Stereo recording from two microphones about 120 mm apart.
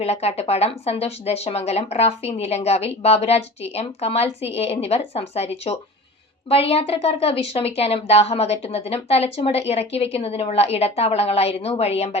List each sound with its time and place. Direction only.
0.0 s speech: 60° left (ahead or behind)